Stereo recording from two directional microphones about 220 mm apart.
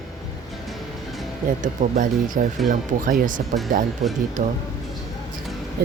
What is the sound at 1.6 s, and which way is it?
Speech, 35° right (ahead or behind).